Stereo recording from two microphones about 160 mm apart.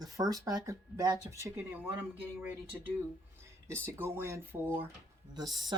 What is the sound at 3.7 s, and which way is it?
Speech, 15° right (ahead or behind).